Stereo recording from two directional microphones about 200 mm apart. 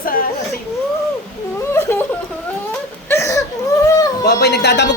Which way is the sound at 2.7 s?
15° left (ahead or behind).